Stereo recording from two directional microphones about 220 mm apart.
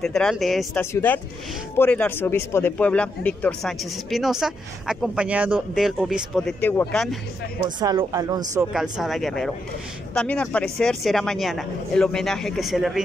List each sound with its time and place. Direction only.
0.0 s a man's voice: 5° left (ahead or behind)
7.8 s speech: 20° right (ahead or behind)
8.7 s a man's voice: centre (ahead or behind)